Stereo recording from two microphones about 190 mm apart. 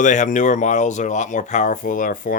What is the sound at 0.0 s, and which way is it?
Speech, 40° left (ahead or behind).